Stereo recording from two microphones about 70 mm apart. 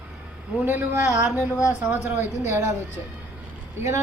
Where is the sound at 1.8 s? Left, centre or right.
Right.